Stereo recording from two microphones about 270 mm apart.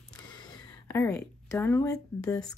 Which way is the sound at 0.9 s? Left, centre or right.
Centre.